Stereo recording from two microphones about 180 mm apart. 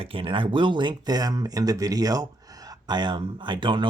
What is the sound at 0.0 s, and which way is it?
Speech, 30° right (ahead or behind).